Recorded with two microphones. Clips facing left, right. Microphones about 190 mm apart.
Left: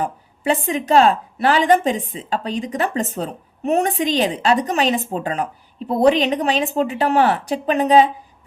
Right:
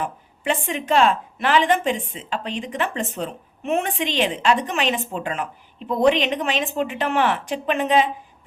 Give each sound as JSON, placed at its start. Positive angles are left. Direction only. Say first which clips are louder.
{"t": 0.0, "sound": "a woman's voice", "louder": "left 4 dB", "side_deg": 35}